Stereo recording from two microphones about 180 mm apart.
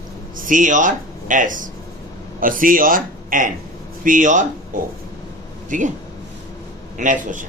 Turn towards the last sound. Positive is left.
turn(degrees=-45)  # may be behind; listen again after turning